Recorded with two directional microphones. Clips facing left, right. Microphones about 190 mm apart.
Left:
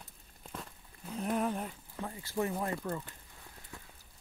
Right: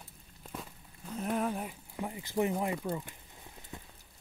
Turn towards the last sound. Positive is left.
turn(degrees=-20)  # may be behind; listen again after turning